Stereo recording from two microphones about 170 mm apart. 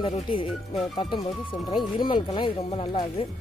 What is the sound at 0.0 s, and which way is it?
Speech, 30° left (ahead or behind).